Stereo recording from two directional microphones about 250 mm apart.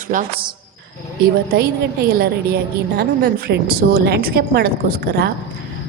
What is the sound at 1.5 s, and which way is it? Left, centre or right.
A woman's voice, right.